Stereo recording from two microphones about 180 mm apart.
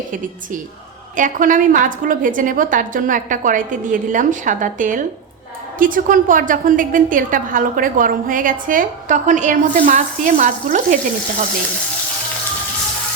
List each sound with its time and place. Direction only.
1.1 s a woman's voice: 45° right (ahead or behind)